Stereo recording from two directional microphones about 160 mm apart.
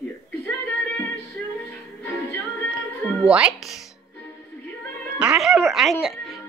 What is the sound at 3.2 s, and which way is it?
Speech, 5° right (ahead or behind).